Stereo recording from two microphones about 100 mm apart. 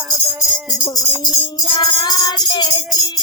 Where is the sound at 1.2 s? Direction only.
45° left (ahead or behind).